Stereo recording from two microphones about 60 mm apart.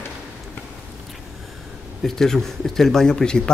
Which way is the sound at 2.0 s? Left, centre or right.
Centre.